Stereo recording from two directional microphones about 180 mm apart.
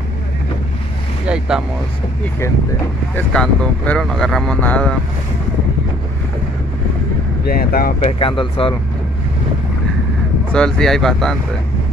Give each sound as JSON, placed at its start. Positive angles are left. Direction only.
{"t": 3.2, "sound": "speech", "side_deg": 5}
{"t": 7.4, "sound": "speech", "side_deg": 55}
{"t": 8.0, "sound": "speech", "side_deg": 30}
{"t": 10.5, "sound": "speech", "side_deg": 5}